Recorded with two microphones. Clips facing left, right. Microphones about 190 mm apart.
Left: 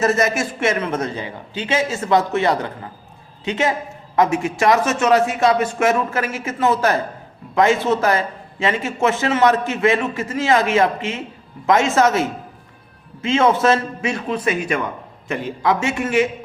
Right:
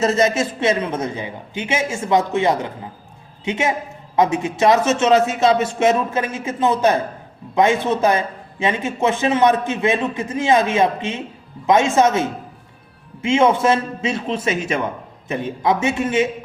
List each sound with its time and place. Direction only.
0.0 s a man's voice: 20° right (ahead or behind)